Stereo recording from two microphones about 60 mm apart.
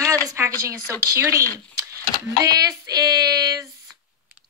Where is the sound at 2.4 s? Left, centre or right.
Right.